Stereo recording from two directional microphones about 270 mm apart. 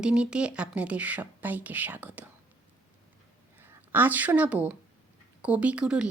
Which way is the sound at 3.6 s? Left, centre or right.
Centre.